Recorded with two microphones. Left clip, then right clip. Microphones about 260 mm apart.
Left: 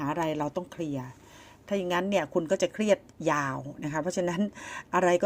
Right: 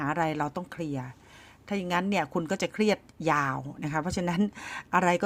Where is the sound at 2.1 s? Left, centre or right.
Right.